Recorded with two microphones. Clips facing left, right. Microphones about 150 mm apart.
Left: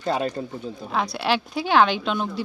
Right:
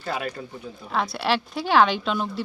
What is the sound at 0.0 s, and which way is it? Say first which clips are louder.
Speech: left 5 dB; 30° left (ahead or behind).